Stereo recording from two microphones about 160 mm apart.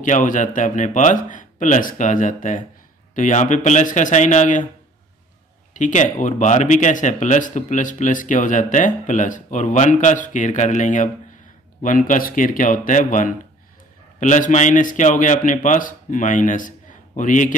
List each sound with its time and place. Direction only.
0.0 s speech: 55° left (ahead or behind)
5.7 s speech: 50° left (ahead or behind)